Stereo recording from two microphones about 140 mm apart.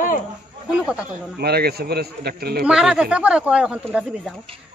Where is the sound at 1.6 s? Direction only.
90° right.